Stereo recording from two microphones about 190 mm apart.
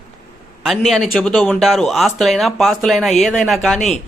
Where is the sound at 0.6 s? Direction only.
Centre (ahead or behind).